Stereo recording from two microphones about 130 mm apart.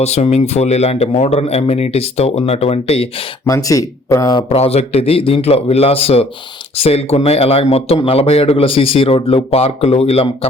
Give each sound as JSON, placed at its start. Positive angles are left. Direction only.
{"t": 0.0, "sound": "speech", "side_deg": 55}
{"t": 3.4, "sound": "speech", "side_deg": 25}
{"t": 4.5, "sound": "speech", "side_deg": 55}